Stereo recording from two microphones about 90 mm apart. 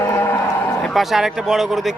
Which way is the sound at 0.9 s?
Centre (ahead or behind).